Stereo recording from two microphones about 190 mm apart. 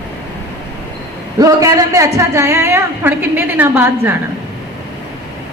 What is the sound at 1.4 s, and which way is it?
A woman's voice, 20° right (ahead or behind).